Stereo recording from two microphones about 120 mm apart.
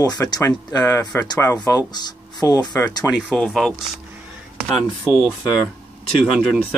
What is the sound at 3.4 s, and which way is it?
Speech, 5° left (ahead or behind).